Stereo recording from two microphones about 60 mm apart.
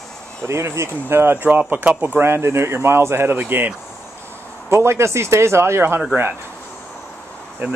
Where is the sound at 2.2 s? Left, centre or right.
Right.